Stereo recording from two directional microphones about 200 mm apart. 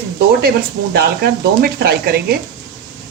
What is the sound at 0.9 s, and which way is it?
Speech, 55° right (ahead or behind).